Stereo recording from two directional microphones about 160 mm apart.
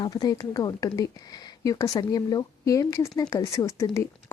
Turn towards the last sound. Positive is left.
turn(degrees=20)  # may be behind; listen again after turning